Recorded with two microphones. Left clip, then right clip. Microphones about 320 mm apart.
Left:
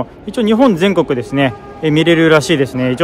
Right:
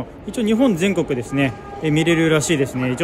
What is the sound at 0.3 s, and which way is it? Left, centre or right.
Speech, centre.